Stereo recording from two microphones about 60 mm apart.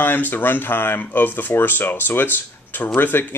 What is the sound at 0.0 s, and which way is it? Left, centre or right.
Speech, left.